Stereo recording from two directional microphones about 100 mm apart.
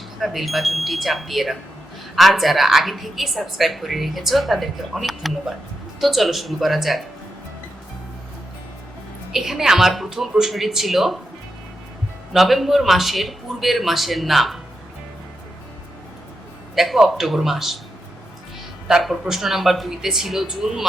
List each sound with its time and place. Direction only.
0.2 s a woman's voice: centre (ahead or behind)
9.3 s a woman's voice: 5° right (ahead or behind)
12.3 s a woman's voice: centre (ahead or behind)
16.7 s a woman's voice: centre (ahead or behind)
18.9 s a woman's voice: 5° right (ahead or behind)